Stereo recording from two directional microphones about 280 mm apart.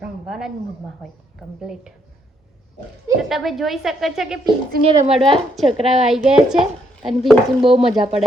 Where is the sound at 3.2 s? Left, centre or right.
Centre.